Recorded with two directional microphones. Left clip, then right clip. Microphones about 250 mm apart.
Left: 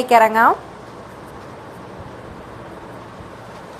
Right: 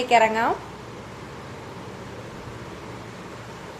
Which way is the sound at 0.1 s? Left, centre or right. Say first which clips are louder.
Left 7 dB; centre.